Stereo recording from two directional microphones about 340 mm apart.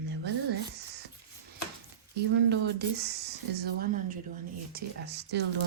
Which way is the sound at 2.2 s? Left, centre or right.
Right.